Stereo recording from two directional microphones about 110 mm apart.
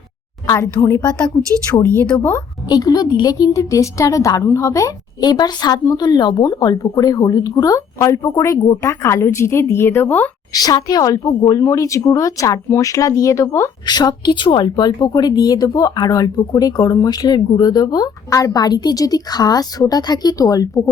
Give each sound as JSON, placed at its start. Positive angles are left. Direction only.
{"t": 0.4, "sound": "a woman's voice", "side_deg": 25}
{"t": 1.7, "sound": "a woman's voice", "side_deg": 35}
{"t": 10.5, "sound": "a woman's voice", "side_deg": 35}
{"t": 13.8, "sound": "a woman's voice", "side_deg": 40}